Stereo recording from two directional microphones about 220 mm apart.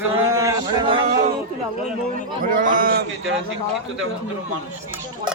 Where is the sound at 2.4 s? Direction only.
40° right (ahead or behind).